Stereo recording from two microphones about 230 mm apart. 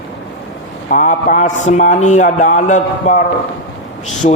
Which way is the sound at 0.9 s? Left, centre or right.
Left.